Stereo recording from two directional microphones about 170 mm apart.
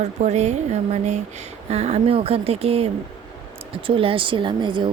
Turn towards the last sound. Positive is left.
turn(degrees=-30)  # may be behind; listen again after turning